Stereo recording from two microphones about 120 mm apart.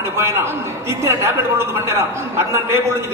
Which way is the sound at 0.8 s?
20° right (ahead or behind).